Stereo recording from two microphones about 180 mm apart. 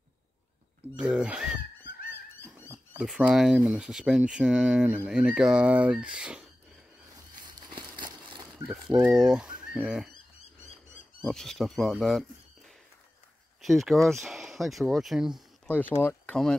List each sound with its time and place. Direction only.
0.9 s speech: 5° right (ahead or behind)
3.0 s speech: 5° right (ahead or behind)
7.4 s a sound: 25° right (ahead or behind)
9.0 s speech: centre (ahead or behind)
11.2 s speech: centre (ahead or behind)
16.0 s speech: 10° left (ahead or behind)